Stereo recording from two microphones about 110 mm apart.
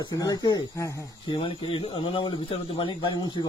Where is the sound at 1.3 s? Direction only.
50° left (ahead or behind).